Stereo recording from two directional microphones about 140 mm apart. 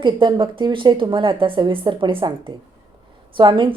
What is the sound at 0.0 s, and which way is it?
Speech, 35° right (ahead or behind).